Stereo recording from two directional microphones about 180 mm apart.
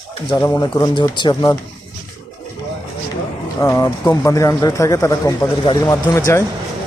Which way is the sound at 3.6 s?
15° left (ahead or behind).